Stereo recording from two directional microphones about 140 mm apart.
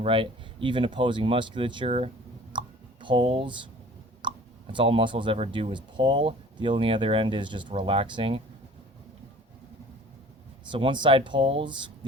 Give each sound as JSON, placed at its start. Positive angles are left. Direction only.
{"t": 0.0, "sound": "speech", "side_deg": -40}
{"t": 2.5, "sound": "a sound", "side_deg": -35}
{"t": 4.2, "sound": "speech", "side_deg": -35}
{"t": 10.7, "sound": "speech", "side_deg": -35}